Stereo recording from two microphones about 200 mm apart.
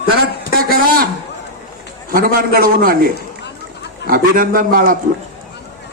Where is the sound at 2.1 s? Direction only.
45° right (ahead or behind).